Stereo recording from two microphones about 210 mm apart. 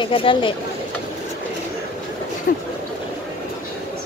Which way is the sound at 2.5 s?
50° left (ahead or behind).